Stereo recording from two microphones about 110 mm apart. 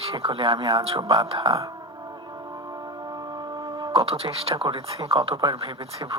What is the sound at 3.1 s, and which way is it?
Music, 40° right (ahead or behind).